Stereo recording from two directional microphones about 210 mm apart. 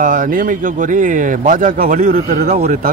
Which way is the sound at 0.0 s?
40° right (ahead or behind).